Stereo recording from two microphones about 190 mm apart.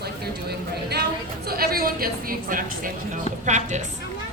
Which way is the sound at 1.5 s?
50° right (ahead or behind).